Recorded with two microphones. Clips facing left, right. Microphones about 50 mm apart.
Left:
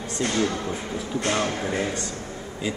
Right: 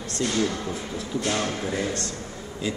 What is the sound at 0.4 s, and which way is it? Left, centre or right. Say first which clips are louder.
Speech: left 1 dB; centre.